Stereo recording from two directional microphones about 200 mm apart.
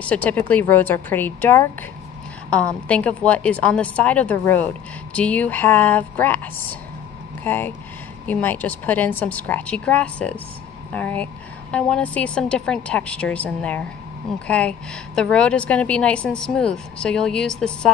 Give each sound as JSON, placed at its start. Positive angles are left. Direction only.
{"t": 0.0, "sound": "a woman's voice", "side_deg": 5}